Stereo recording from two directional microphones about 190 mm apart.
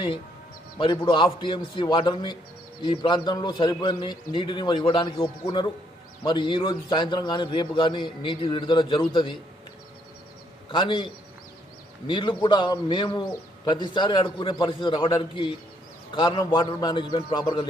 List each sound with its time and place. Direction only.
0.8 s a man's voice: 25° left (ahead or behind)
10.7 s a man's voice: 25° left (ahead or behind)